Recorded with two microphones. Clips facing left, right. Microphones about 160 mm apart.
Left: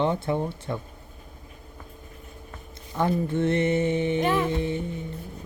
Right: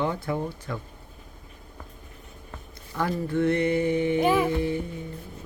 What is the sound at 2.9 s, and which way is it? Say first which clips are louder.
Speech: left 2 dB; 20° left (ahead or behind).